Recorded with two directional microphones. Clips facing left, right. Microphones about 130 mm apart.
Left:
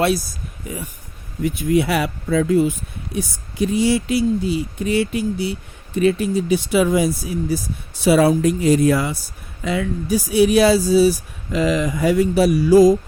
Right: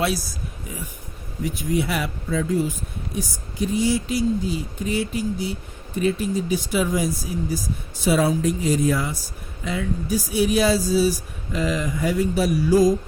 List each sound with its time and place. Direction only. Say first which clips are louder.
1.5 s speech: left 6 dB; 70° left (ahead or behind)
11.5 s speech: left 5 dB; 85° left